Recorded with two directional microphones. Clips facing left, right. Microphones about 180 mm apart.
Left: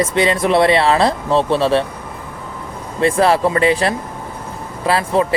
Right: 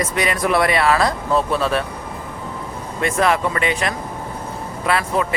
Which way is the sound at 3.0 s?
30° left (ahead or behind).